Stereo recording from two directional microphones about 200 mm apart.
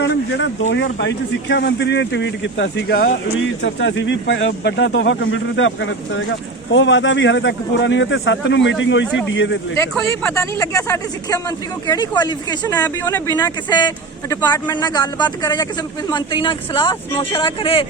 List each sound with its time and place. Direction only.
0.0 s a sound: 60° left (ahead or behind)
0.9 s speech: 60° left (ahead or behind)
3.6 s speech: 65° left (ahead or behind)
10.1 s speech: 15° left (ahead or behind)